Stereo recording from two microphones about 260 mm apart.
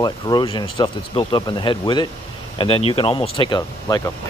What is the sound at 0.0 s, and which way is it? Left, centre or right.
Speech, centre.